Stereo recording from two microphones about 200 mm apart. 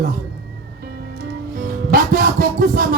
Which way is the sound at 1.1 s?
45° right (ahead or behind).